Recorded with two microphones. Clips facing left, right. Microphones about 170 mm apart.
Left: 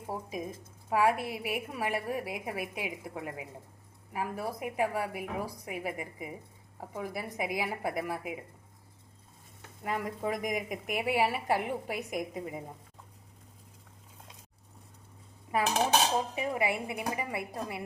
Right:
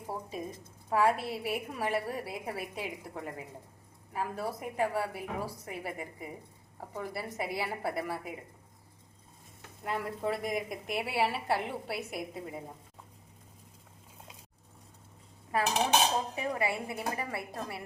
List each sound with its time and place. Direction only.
0.1 s a woman's voice: 10° left (ahead or behind)
9.8 s a woman's voice: 10° left (ahead or behind)
15.5 s dishes: 20° left (ahead or behind)
16.3 s a woman's voice: 15° left (ahead or behind)